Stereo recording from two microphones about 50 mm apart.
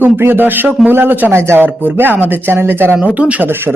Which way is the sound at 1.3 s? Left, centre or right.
Right.